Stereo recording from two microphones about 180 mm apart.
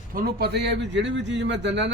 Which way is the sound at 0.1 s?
55° right (ahead or behind).